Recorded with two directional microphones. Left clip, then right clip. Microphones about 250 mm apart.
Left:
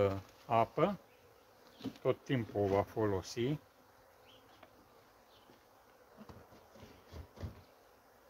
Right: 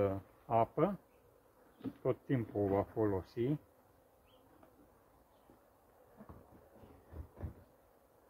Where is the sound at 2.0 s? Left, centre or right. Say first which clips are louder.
Left 2 dB; centre.